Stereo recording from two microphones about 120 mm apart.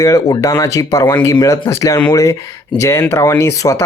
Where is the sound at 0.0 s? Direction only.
30° left (ahead or behind).